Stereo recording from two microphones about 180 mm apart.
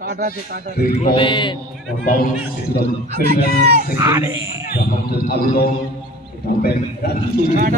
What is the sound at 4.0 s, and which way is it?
Speech, 20° right (ahead or behind).